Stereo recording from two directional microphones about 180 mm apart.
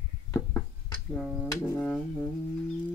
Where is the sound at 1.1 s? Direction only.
Centre (ahead or behind).